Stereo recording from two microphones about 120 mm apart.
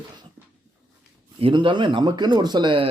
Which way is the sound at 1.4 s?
45° right (ahead or behind).